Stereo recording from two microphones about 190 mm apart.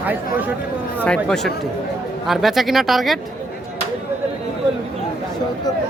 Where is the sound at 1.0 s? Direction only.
5° left (ahead or behind).